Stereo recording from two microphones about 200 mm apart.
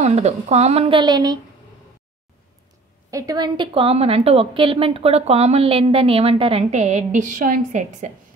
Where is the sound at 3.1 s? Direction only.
15° right (ahead or behind).